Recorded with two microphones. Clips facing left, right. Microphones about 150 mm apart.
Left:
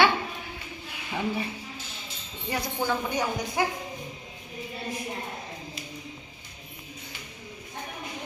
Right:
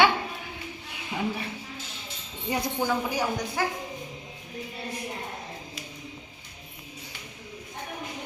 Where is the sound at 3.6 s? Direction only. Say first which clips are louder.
Left 2 dB; 15° left (ahead or behind).